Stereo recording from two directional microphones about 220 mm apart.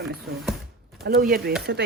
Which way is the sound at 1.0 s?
40° right (ahead or behind).